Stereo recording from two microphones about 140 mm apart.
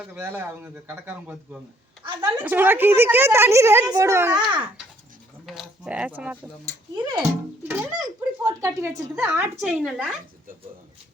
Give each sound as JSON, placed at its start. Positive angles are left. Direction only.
{"t": 0.0, "sound": "a woman's voice", "side_deg": -15}
{"t": 4.4, "sound": "speech", "side_deg": -35}
{"t": 5.5, "sound": "a woman's voice", "side_deg": -5}
{"t": 6.9, "sound": "speech", "side_deg": -30}
{"t": 7.7, "sound": "a woman's voice", "side_deg": -20}